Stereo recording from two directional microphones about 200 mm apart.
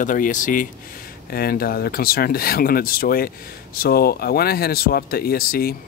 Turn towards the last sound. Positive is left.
turn(degrees=50)  # may be behind; listen again after turning